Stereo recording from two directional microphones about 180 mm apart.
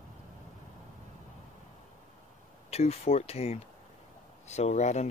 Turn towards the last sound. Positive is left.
turn(degrees=40)  # may be behind; listen again after turning